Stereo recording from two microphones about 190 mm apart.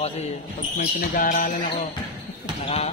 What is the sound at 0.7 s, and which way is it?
Speech, 45° left (ahead or behind).